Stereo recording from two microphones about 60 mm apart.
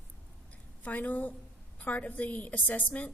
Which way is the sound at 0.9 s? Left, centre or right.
Left.